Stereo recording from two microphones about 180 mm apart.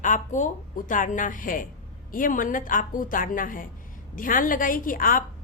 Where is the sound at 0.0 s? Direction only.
45° left (ahead or behind).